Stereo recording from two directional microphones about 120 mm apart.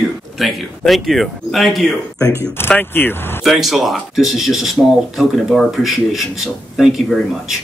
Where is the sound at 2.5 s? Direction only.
15° left (ahead or behind).